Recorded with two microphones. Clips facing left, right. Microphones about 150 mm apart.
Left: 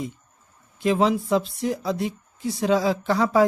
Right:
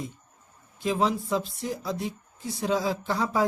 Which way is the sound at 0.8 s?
70° left (ahead or behind).